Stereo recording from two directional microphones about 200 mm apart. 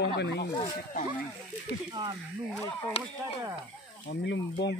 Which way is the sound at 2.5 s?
10° left (ahead or behind).